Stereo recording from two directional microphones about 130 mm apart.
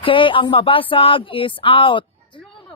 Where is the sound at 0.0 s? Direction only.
40° left (ahead or behind).